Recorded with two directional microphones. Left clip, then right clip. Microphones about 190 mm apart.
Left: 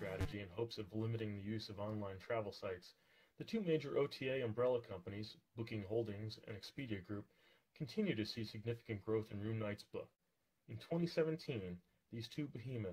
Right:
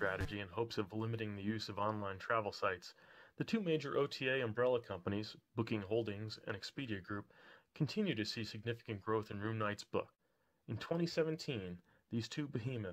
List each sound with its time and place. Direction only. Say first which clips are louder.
0.3 s speech: right 4 dB; 30° right (ahead or behind)